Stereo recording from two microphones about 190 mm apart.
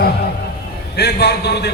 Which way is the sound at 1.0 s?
60° left (ahead or behind).